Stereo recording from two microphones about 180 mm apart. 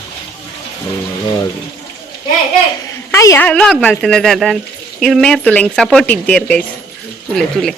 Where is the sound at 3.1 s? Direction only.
15° left (ahead or behind).